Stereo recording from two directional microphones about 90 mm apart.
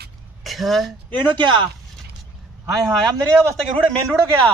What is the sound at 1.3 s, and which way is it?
Speech, 60° right (ahead or behind).